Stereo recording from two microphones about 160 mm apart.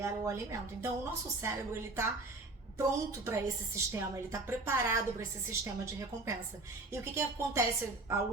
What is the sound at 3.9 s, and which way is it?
A woman's voice, 15° right (ahead or behind).